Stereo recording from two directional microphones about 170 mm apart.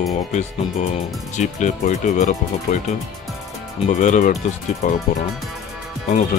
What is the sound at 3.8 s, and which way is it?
Speech, 45° left (ahead or behind).